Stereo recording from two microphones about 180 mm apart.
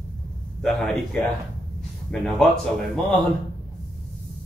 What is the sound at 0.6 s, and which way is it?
Speech, centre (ahead or behind).